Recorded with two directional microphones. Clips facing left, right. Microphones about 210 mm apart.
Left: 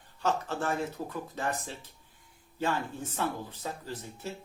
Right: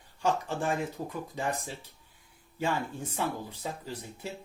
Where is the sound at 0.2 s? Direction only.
15° right (ahead or behind).